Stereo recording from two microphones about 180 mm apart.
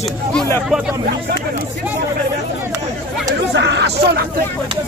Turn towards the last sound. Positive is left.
turn(degrees=-70)  # may be behind; listen again after turning